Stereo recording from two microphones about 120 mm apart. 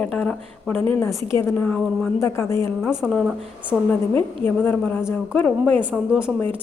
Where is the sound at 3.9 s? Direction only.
15° left (ahead or behind).